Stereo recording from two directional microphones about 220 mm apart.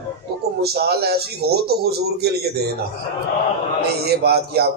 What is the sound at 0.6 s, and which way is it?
A man's voice, 45° right (ahead or behind).